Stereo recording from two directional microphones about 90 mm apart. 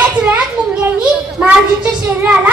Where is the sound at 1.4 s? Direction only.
15° right (ahead or behind).